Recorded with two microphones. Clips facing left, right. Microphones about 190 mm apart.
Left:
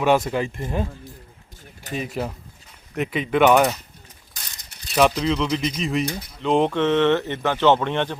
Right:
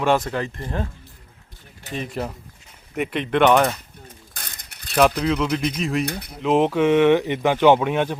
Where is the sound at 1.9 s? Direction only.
5° left (ahead or behind).